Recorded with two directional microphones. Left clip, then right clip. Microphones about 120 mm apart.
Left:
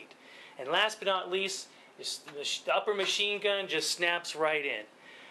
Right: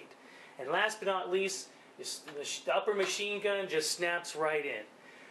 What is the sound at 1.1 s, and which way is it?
Speech, 20° left (ahead or behind).